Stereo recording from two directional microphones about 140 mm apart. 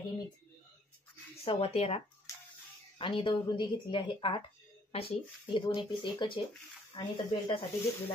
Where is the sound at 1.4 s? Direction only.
45° left (ahead or behind).